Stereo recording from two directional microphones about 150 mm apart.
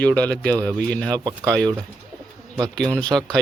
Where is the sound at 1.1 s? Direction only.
25° right (ahead or behind).